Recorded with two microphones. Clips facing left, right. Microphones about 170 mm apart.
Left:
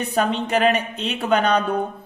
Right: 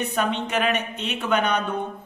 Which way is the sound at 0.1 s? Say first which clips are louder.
Left 4 dB; 35° left (ahead or behind).